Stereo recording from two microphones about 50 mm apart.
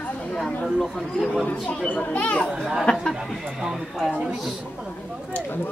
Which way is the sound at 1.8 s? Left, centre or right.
Left.